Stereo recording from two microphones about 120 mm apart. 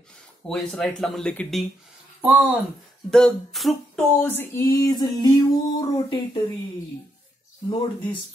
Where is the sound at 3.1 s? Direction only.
Centre (ahead or behind).